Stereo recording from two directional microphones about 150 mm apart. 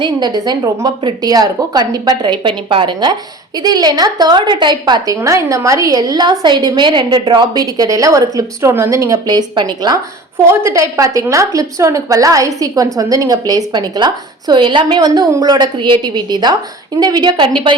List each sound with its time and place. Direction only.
0.0 s a woman's voice: 25° right (ahead or behind)